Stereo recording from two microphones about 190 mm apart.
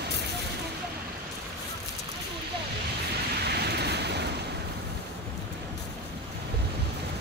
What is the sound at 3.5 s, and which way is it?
Vehicle, 60° right (ahead or behind).